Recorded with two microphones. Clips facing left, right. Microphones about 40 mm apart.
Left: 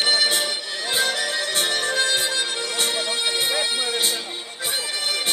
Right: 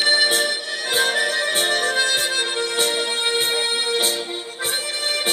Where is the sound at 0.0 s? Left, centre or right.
Centre.